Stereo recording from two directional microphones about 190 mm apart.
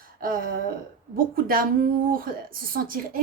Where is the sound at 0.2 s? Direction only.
50° right (ahead or behind).